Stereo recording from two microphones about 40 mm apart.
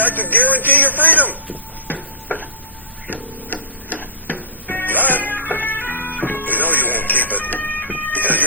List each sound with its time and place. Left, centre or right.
0.0 s speech: left
1.9 s chopping: left
3.1 s music: left
7.9 s fire alarm: left